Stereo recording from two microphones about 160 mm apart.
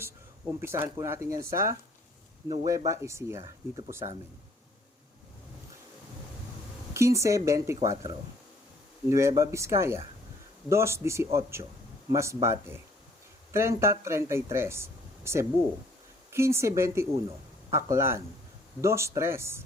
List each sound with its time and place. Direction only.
0.0 s speech: 15° right (ahead or behind)
6.9 s speech: 20° right (ahead or behind)
9.0 s speech: 20° right (ahead or behind)